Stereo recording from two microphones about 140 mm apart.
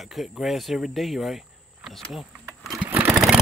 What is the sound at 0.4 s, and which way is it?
Speech, centre (ahead or behind).